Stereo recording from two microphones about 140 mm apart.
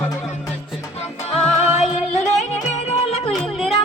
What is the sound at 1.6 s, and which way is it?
Music, 55° left (ahead or behind).